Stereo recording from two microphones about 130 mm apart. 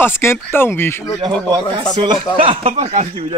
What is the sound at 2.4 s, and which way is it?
Speech, 45° right (ahead or behind).